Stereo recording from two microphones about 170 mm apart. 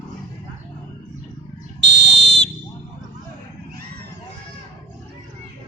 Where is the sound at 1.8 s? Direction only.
90° right.